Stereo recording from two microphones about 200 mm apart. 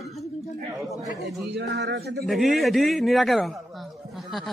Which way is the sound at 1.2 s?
60° right (ahead or behind).